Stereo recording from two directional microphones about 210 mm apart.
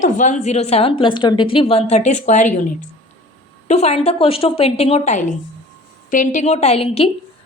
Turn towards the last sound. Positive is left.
turn(degrees=25)  # may be behind; listen again after turning